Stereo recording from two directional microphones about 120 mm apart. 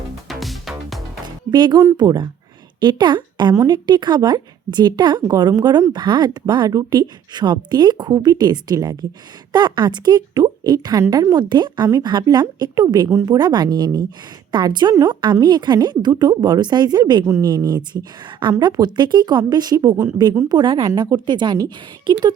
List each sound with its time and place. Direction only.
0.3 s music: centre (ahead or behind)
1.5 s speech: 35° right (ahead or behind)
13.1 s a woman's voice: 20° right (ahead or behind)
13.3 s speech: 35° right (ahead or behind)
20.5 s speech: 40° right (ahead or behind)